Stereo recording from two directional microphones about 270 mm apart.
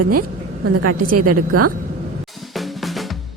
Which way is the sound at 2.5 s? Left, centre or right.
Centre.